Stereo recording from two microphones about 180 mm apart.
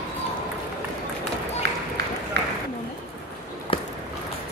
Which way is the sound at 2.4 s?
75° right (ahead or behind).